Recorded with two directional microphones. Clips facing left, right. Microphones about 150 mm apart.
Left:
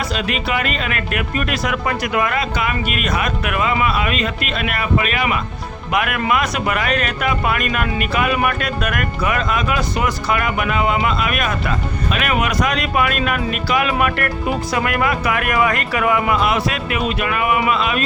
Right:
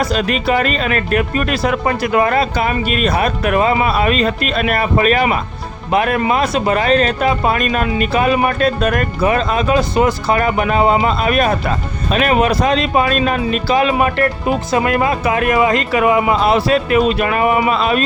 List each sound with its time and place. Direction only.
0.0 s speech: 40° right (ahead or behind)